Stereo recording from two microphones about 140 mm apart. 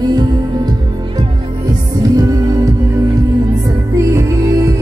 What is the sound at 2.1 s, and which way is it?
Music, 25° right (ahead or behind).